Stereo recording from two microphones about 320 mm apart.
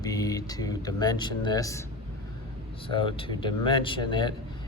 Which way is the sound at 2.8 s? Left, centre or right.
Centre.